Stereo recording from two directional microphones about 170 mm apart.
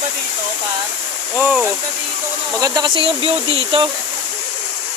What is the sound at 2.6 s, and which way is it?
Speech, 25° right (ahead or behind).